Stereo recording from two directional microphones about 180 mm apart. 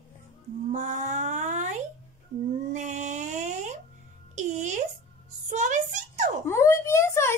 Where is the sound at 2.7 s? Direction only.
40° right (ahead or behind).